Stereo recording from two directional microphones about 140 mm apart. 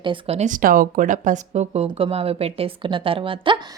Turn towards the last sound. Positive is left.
turn(degrees=-40)  # may be behind; listen again after turning